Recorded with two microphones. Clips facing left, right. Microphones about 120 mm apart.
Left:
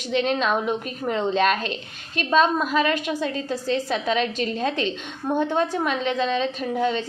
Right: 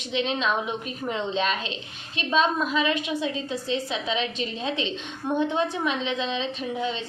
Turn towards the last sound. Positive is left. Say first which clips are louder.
# left 5 dB
turn(degrees=45)  # may be behind; listen again after turning